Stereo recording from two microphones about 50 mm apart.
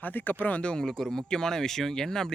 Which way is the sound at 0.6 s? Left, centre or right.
Centre.